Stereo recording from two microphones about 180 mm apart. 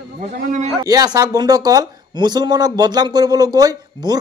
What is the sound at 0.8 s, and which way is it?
Speech, 20° right (ahead or behind).